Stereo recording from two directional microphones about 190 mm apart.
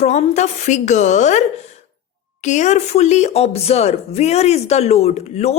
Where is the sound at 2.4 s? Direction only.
40° left (ahead or behind).